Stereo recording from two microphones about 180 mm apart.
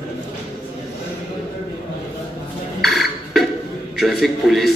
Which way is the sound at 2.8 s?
Centre (ahead or behind).